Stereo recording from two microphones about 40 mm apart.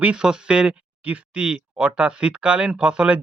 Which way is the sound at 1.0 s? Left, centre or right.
Right.